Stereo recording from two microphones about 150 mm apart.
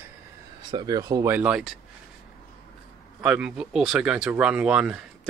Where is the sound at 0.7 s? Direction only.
30° right (ahead or behind).